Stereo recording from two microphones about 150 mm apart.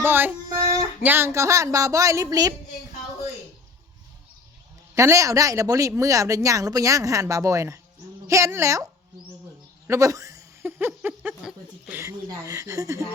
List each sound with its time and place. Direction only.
0.0 s speech: 15° right (ahead or behind)
0.4 s a sound: 20° right (ahead or behind)
1.0 s speech: 15° right (ahead or behind)
4.9 s speech: 20° right (ahead or behind)
12.0 s speech: 20° right (ahead or behind)